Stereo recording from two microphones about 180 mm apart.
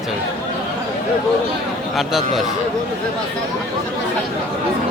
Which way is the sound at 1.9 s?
Centre (ahead or behind).